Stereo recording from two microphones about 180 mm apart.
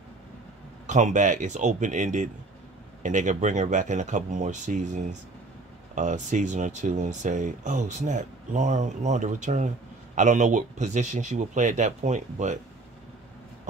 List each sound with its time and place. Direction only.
0.8 s speech: 45° right (ahead or behind)